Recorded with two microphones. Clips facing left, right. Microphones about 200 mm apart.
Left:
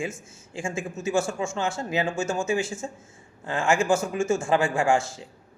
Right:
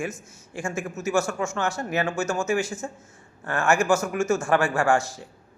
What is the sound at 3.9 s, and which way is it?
Speech, 30° left (ahead or behind).